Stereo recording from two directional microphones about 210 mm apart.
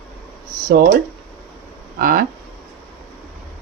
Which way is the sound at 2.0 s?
40° right (ahead or behind).